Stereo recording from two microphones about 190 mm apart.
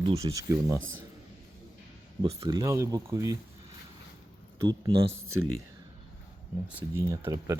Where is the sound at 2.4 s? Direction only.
20° right (ahead or behind).